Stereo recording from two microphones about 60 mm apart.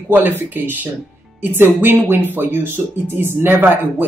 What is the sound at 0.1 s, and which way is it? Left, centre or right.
Speech, right.